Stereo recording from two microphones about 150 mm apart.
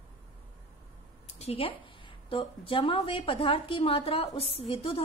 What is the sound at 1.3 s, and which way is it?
A woman's voice, 40° left (ahead or behind).